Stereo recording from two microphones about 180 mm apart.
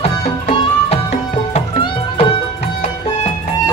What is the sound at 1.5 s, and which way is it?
Music, 35° left (ahead or behind).